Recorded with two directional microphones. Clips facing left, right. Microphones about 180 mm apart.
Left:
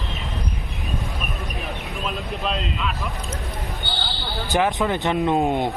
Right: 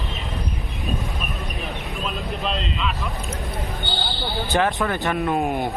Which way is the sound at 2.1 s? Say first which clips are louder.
Left 1 dB; centre (ahead or behind).